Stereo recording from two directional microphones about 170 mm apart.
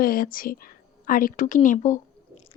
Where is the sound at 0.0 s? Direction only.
55° left (ahead or behind).